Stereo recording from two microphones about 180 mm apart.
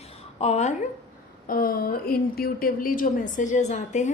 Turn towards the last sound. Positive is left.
turn(degrees=40)  # may be behind; listen again after turning